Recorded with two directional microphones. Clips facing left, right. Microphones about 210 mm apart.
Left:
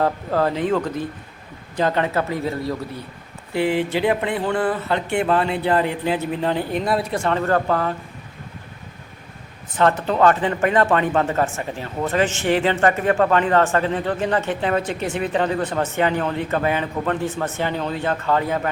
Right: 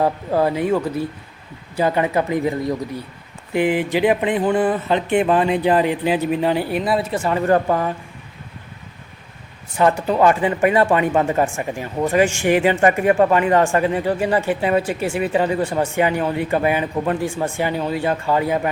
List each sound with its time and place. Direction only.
0.0 s speech: 15° right (ahead or behind)
9.7 s speech: 10° right (ahead or behind)